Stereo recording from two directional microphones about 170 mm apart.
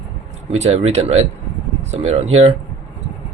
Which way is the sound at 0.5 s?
40° right (ahead or behind).